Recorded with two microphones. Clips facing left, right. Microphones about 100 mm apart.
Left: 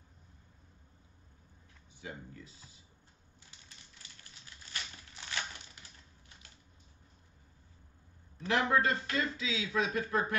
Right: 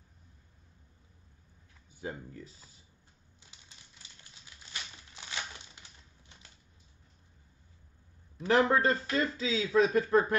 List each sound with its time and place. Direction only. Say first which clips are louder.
2.0 s speech: right 5 dB; 40° right (ahead or behind)
3.4 s typewriter: even; 20° right (ahead or behind)
5.3 s typewriter: left 1 dB; 20° right (ahead or behind)
8.5 s speech: right 4 dB; 35° right (ahead or behind)